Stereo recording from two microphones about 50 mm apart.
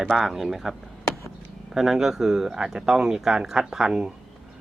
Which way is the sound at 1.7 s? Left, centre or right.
Centre.